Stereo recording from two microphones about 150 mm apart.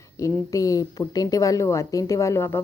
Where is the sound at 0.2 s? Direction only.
20° left (ahead or behind).